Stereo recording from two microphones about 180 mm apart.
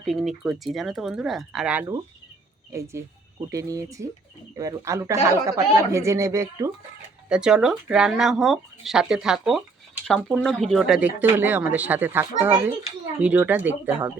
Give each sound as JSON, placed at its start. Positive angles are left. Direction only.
{"t": 0.0, "sound": "speech", "side_deg": 0}
{"t": 7.3, "sound": "speech", "side_deg": -5}